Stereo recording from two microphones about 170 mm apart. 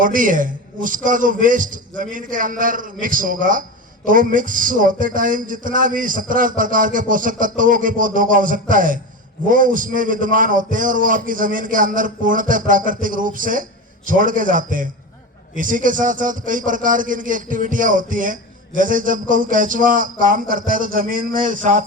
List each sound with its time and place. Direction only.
0.0 s a man's voice: 50° right (ahead or behind)